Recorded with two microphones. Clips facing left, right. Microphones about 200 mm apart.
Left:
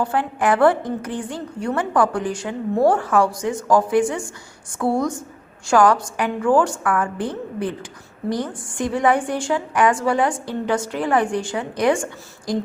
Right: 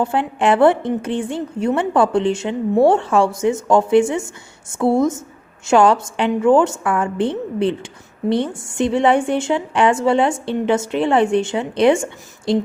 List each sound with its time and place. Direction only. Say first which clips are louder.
0.0 s a woman's voice: right 3 dB; 25° right (ahead or behind)